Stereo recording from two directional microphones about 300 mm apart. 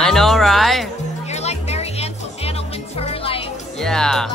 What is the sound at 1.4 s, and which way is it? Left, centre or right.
Music, left.